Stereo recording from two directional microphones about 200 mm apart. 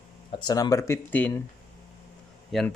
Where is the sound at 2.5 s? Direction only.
Centre (ahead or behind).